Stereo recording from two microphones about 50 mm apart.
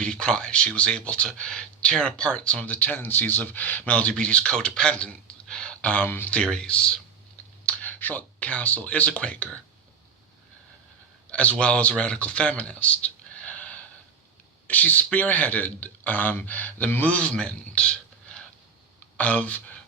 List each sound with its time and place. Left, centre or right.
0.0 s speech: centre; by 3.9 s left
4.2 s speech: left
6.3 s speech: centre
7.6 s speech: left
11.3 s a man's voice: left